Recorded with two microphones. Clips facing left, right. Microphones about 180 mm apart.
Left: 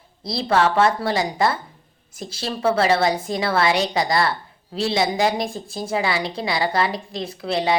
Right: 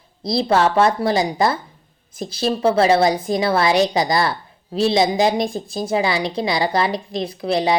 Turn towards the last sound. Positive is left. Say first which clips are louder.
# right 3 dB
turn(degrees=-20)  # may be behind; listen again after turning